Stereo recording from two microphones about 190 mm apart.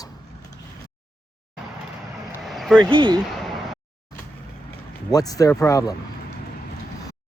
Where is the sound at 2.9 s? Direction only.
25° right (ahead or behind).